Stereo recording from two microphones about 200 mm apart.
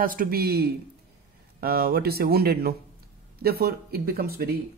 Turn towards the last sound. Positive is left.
turn(degrees=-50)  # may be behind; listen again after turning